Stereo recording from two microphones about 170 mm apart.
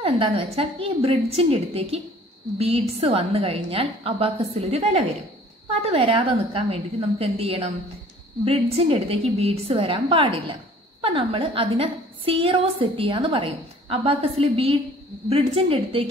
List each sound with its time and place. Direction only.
0.0 s a woman's voice: 35° right (ahead or behind)